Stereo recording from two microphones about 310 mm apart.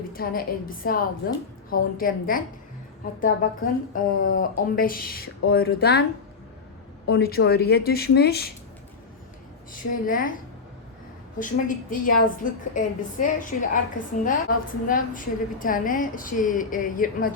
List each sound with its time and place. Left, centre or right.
0.1 s a woman's voice: left
7.1 s speech: left
10.1 s a woman's voice: left
11.3 s a woman's voice: left